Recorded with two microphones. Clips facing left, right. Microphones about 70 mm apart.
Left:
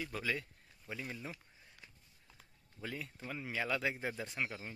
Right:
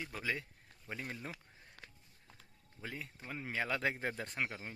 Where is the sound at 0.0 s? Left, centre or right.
Right.